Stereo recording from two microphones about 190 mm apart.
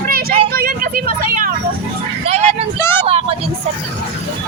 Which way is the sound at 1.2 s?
50° right (ahead or behind).